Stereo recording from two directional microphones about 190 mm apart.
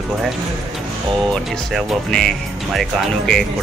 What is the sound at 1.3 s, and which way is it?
Speech, centre (ahead or behind).